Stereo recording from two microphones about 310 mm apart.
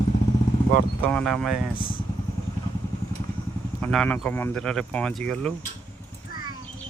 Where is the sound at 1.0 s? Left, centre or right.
Centre.